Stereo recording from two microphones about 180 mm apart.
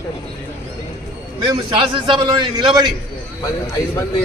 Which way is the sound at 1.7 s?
25° right (ahead or behind).